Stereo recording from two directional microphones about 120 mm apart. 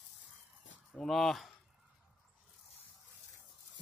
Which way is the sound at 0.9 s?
Centre (ahead or behind).